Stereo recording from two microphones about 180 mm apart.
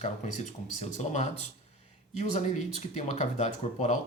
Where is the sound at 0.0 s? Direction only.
40° left (ahead or behind).